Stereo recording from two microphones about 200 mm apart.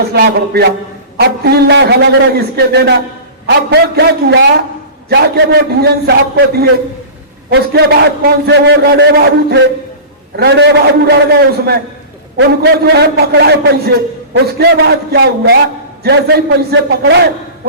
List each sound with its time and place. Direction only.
0.0 s a man's voice: 55° right (ahead or behind)